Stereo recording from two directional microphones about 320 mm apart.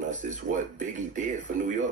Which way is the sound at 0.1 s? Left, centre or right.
Right.